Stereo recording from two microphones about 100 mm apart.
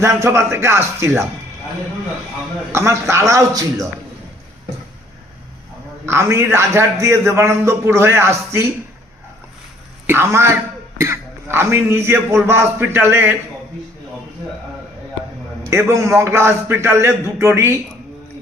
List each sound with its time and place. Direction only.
0.0 s a man's voice: 30° right (ahead or behind)
2.7 s a man's voice: 25° right (ahead or behind)
6.1 s a man's voice: 25° right (ahead or behind)
10.1 s a man's voice: 25° right (ahead or behind)
15.7 s a man's voice: 30° right (ahead or behind)